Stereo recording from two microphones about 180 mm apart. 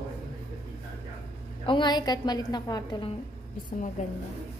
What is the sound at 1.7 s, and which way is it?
A woman's voice, 25° left (ahead or behind).